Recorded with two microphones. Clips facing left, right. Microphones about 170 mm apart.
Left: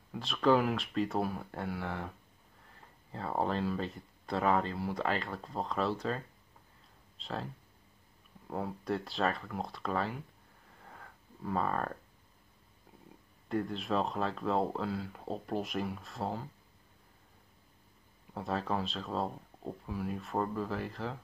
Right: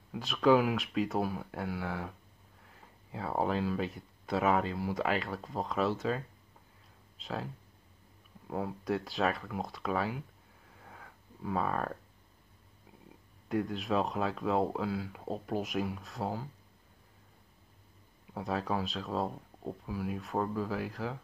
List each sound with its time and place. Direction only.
0.1 s speech: centre (ahead or behind)
8.5 s speech: centre (ahead or behind)
10.7 s a sound: centre (ahead or behind)
13.5 s speech: centre (ahead or behind)
18.3 s speech: centre (ahead or behind)